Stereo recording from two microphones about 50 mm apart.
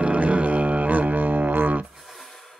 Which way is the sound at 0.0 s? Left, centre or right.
Right.